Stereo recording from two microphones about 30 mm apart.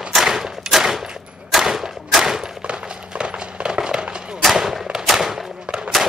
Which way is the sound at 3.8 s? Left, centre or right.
Right.